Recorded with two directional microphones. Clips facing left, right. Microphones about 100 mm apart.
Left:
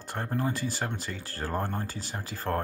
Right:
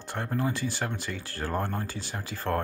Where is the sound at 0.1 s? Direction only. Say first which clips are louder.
Right 1 dB; 40° left (ahead or behind).